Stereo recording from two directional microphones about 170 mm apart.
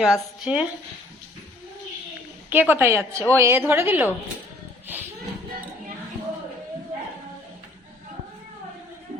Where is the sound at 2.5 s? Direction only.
10° right (ahead or behind).